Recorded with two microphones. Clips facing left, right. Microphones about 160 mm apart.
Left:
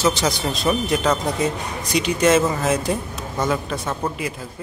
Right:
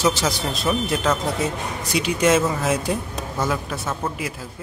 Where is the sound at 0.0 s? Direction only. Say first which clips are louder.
Left 1 dB; 5° right (ahead or behind).